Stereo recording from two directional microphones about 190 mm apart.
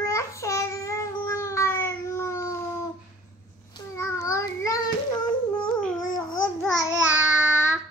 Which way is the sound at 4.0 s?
15° left (ahead or behind).